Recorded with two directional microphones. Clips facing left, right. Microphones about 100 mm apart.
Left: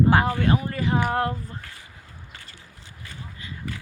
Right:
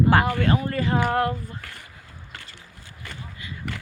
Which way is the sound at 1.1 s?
25° left (ahead or behind).